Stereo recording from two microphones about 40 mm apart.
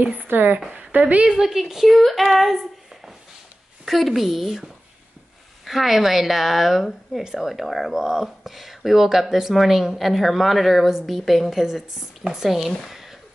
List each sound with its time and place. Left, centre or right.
0.0 s a woman's voice: right
0.3 s a woman's voice: right
0.7 s a woman's voice: right
1.2 s a woman's voice: centre
1.9 s speech: centre
3.8 s speech: centre
5.7 s speech: centre